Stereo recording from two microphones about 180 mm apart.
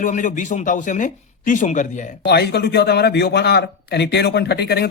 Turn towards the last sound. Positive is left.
turn(degrees=65)  # may be behind; listen again after turning